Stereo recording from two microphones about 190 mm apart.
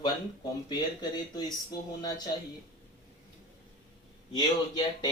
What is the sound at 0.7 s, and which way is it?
Speech, 20° left (ahead or behind).